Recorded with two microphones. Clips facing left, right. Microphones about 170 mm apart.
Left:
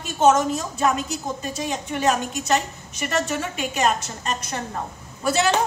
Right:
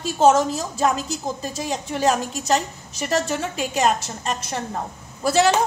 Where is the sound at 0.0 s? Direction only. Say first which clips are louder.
Right 1 dB; 30° right (ahead or behind).